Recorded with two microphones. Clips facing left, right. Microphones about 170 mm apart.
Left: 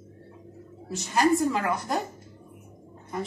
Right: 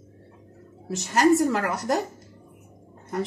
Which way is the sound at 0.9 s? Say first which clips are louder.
Right 3 dB; 85° right.